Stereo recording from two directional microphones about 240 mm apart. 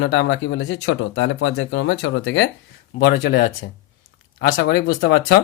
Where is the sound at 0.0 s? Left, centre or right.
Left.